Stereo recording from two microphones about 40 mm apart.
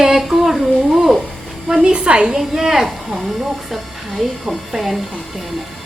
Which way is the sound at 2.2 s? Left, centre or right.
Centre.